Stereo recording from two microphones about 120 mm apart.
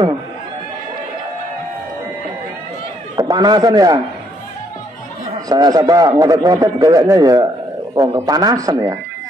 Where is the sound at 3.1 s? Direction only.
35° right (ahead or behind).